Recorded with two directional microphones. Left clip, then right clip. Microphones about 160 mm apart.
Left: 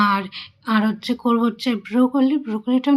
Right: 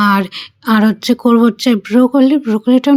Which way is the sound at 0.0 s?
45° right (ahead or behind).